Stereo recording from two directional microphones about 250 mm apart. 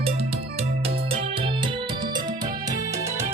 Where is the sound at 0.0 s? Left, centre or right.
Right.